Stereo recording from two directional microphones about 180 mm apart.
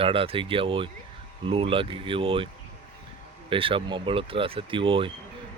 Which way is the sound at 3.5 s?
30° right (ahead or behind).